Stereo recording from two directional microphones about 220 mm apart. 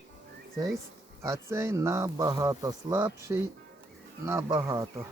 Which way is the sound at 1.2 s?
15° right (ahead or behind).